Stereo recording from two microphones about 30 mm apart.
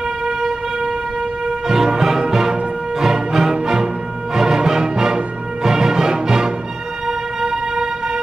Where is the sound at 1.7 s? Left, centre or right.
Centre.